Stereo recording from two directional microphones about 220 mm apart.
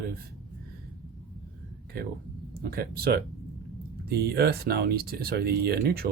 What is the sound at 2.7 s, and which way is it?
Speech, 45° right (ahead or behind).